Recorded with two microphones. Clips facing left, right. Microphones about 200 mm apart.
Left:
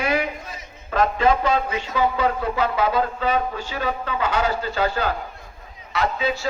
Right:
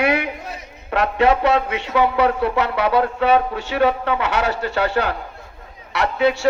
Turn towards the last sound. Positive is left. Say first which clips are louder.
# right 5 dB
turn(degrees=-70)  # may be behind; listen again after turning